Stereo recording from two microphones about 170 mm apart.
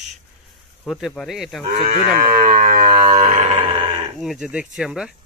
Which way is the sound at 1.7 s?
45° right (ahead or behind).